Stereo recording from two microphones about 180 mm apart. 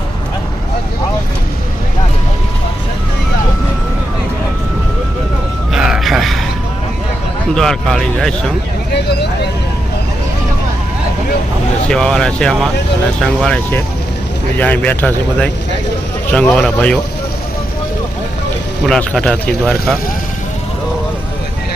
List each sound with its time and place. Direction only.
5.7 s a sound: 5° right (ahead or behind)
7.5 s speech: centre (ahead or behind)
9.0 s speech: 65° left (ahead or behind)
11.9 s speech: 5° left (ahead or behind)
18.9 s speech: 5° left (ahead or behind)